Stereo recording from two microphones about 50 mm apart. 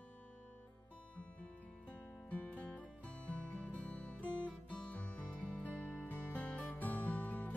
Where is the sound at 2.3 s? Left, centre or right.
Left.